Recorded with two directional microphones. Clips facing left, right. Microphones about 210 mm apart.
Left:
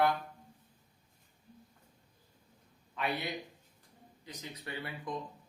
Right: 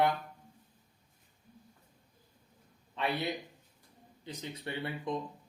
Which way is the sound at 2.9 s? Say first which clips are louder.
Right 2 dB; 30° right (ahead or behind).